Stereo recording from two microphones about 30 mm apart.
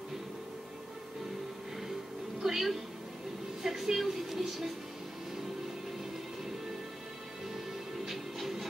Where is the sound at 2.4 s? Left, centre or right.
Centre.